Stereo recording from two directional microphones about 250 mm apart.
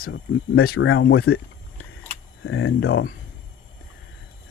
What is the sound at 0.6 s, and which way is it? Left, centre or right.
Speech, left.